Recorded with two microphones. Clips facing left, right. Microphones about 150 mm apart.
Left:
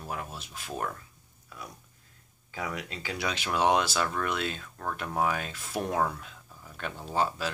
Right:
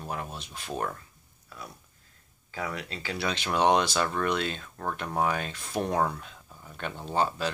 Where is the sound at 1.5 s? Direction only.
15° left (ahead or behind).